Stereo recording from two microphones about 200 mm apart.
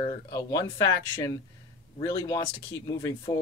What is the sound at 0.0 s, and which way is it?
Speech, 20° left (ahead or behind).